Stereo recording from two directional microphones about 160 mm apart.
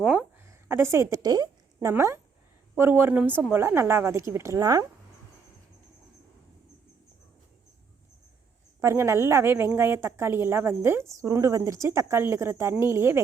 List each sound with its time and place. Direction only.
0.0 s a woman's voice: 5° right (ahead or behind)
8.8 s a woman's voice: 15° right (ahead or behind)